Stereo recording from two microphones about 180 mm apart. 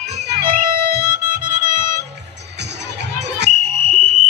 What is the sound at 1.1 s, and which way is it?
Music, 50° right (ahead or behind).